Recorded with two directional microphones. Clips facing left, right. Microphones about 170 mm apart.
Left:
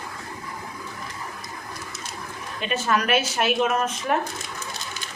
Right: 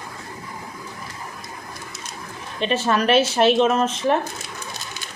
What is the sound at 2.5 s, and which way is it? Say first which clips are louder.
Speech: right 4 dB; 30° right (ahead or behind).